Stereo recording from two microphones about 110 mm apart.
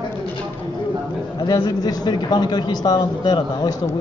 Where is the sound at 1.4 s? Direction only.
40° left (ahead or behind).